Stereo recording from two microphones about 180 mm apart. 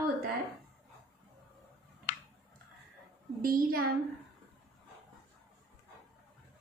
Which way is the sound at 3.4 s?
55° right (ahead or behind).